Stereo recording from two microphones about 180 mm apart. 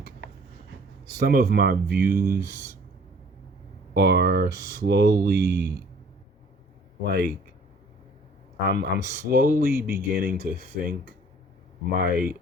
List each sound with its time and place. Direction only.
1.1 s speech: 55° right (ahead or behind)
3.9 s speech: 65° right (ahead or behind)
4.5 s speech: 50° left (ahead or behind)
4.8 s speech: 65° right (ahead or behind)
7.0 s speech: 60° right (ahead or behind)
8.7 s speech: 65° right (ahead or behind)
11.9 s speech: 55° right (ahead or behind)